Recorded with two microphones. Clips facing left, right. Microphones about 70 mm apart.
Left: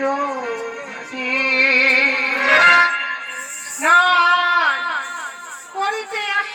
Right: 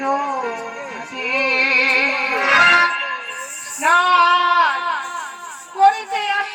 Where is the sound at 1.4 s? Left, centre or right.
Left.